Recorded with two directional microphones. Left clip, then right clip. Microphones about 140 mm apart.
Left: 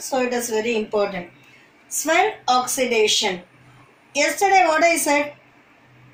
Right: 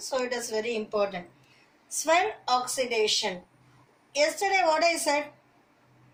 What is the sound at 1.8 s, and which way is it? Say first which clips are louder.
Speech: left 4 dB; 40° left (ahead or behind).